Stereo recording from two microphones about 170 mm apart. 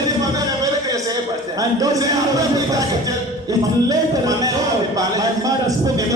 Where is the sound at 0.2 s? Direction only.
20° right (ahead or behind).